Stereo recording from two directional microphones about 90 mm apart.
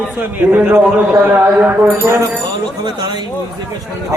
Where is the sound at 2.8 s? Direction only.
55° right (ahead or behind).